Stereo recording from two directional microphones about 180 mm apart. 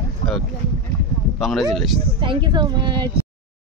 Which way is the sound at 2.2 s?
25° right (ahead or behind).